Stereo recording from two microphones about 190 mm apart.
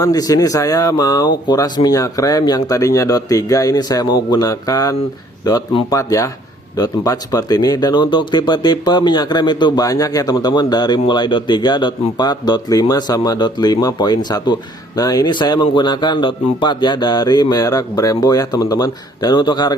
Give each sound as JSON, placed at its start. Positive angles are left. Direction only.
{"t": 0.0, "sound": "speech", "side_deg": 20}